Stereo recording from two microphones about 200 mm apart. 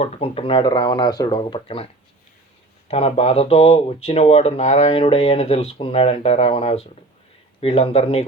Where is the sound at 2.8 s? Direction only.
30° left (ahead or behind).